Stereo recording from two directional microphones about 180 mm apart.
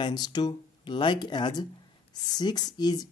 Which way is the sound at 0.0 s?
25° left (ahead or behind).